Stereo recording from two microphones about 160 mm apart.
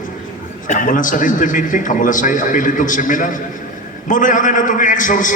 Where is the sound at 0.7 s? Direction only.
55° left (ahead or behind).